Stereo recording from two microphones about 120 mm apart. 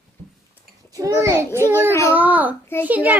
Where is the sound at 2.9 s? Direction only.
15° right (ahead or behind).